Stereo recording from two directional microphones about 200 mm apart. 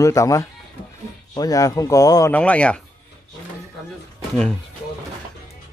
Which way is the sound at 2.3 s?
5° left (ahead or behind).